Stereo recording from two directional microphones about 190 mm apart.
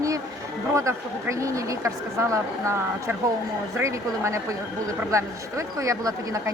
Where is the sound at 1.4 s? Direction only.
15° right (ahead or behind).